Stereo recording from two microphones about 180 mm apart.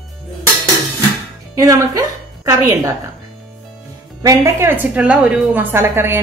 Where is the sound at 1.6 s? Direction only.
20° right (ahead or behind).